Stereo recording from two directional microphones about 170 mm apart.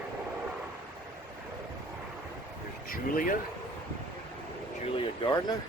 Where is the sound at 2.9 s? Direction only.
55° left (ahead or behind).